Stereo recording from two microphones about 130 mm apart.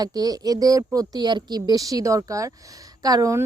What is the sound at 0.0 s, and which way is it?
Speech, 30° right (ahead or behind).